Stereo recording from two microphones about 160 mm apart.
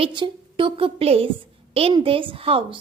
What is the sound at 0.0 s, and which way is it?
A woman's voice, 30° right (ahead or behind).